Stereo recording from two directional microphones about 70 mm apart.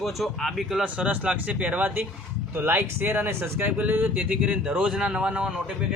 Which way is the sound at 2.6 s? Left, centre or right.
Right.